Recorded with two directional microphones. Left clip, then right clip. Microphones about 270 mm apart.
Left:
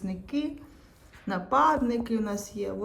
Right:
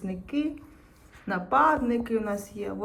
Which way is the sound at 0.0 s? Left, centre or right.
Centre.